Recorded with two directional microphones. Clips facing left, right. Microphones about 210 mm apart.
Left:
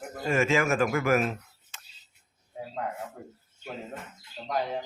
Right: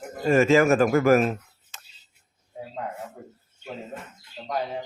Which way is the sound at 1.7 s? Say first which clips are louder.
Right 3 dB; 40° right (ahead or behind).